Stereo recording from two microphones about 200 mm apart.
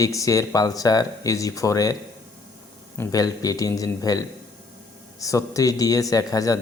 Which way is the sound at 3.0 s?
20° left (ahead or behind).